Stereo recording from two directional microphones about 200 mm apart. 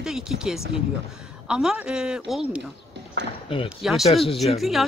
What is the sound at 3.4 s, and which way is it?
Speech, 25° left (ahead or behind).